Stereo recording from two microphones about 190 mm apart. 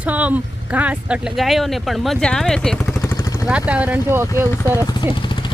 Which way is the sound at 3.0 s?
15° left (ahead or behind).